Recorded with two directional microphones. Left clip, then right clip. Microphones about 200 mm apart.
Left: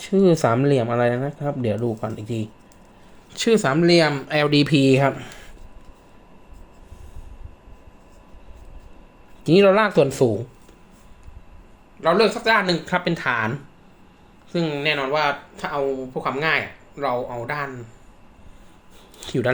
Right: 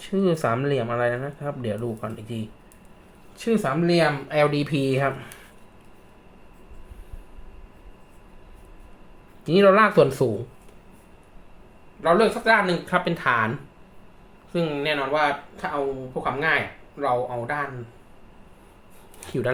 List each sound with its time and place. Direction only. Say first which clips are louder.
0.0 s speech: left 6 dB; 30° left (ahead or behind)
3.3 s speech: left 5 dB; 40° left (ahead or behind)
9.4 s speech: left 1 dB; 35° left (ahead or behind)
12.0 s speech: left 1 dB; 30° left (ahead or behind)
19.2 s speech: left 4 dB; 20° left (ahead or behind)